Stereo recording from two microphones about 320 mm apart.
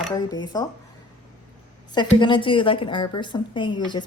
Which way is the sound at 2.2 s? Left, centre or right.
Centre.